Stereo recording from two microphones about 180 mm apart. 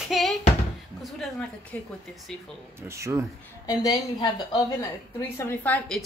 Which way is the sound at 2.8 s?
15° right (ahead or behind).